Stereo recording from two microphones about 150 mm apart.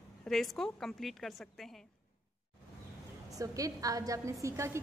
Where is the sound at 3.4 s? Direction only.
25° right (ahead or behind).